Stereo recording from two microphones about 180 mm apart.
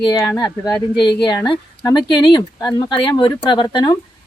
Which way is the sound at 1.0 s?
25° left (ahead or behind).